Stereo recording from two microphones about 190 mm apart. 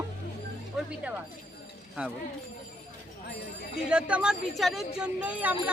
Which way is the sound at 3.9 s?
5° right (ahead or behind).